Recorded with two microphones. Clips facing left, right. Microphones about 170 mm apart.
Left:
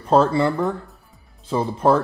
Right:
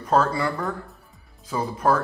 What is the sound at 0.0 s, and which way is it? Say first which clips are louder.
Speech: left 5 dB; 30° left (ahead or behind).